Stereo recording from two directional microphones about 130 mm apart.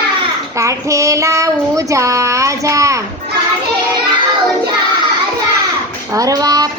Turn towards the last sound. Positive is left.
turn(degrees=-30)  # may be behind; listen again after turning